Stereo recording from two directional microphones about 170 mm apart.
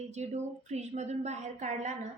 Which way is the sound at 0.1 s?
40° right (ahead or behind).